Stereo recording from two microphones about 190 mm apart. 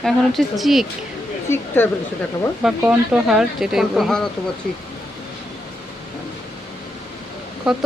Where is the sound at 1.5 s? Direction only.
10° left (ahead or behind).